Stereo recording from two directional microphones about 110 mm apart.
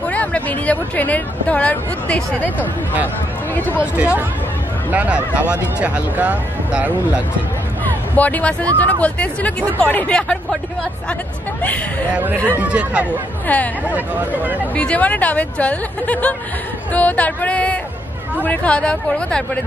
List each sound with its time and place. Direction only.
0.0 s speech: 15° left (ahead or behind)
3.8 s speech: 10° right (ahead or behind)
7.8 s speech: 15° left (ahead or behind)
12.1 s speech: 15° right (ahead or behind)
13.5 s speech: 15° left (ahead or behind)
13.9 s speech: 15° right (ahead or behind)
14.8 s speech: 15° left (ahead or behind)